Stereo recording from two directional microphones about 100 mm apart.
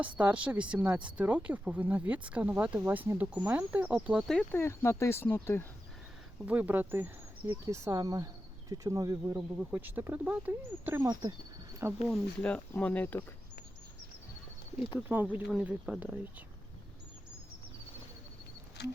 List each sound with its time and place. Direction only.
0.2 s speech: 15° right (ahead or behind)
4.5 s speech: 25° left (ahead or behind)
6.4 s speech: 15° right (ahead or behind); by 9.4 s 35° right (ahead or behind)
9.6 s speech: 15° right (ahead or behind)
11.0 s speech: 40° right (ahead or behind)
11.8 s speech: 25° right (ahead or behind)
12.4 s speech: 10° left (ahead or behind)
14.9 s speech: 15° right (ahead or behind)